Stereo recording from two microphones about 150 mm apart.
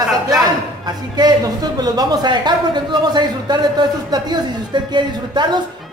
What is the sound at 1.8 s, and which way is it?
A man's voice, 25° right (ahead or behind).